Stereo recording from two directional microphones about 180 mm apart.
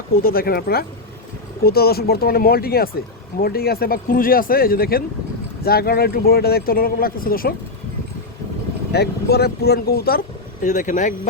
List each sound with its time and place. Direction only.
0.2 s speech: 55° left (ahead or behind)
8.9 s speech: 65° left (ahead or behind); by 11.1 s 45° left (ahead or behind)